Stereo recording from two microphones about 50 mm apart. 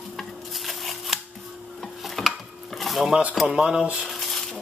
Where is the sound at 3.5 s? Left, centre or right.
Centre.